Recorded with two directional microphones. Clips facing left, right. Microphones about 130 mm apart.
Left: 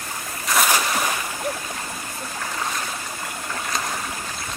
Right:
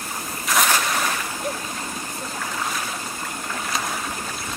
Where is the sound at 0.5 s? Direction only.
Centre (ahead or behind).